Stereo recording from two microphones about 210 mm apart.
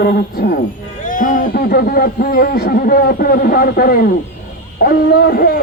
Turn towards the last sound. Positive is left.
turn(degrees=45)  # may be behind; listen again after turning